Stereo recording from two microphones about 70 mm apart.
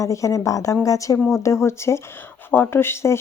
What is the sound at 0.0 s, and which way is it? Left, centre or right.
Speech, left.